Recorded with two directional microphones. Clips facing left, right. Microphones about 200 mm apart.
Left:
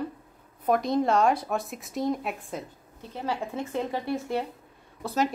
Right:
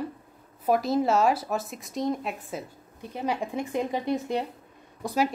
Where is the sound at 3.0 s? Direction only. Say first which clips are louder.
Right 2 dB; 15° right (ahead or behind).